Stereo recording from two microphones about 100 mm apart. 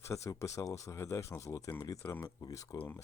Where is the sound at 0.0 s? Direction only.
30° left (ahead or behind).